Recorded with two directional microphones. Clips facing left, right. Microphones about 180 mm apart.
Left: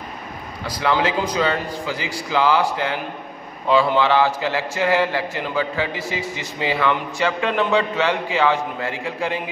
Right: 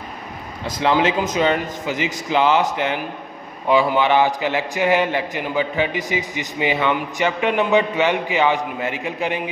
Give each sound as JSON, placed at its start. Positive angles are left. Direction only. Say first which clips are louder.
{"t": 0.7, "sound": "a man's voice", "louder": "right 2 dB", "side_deg": -25}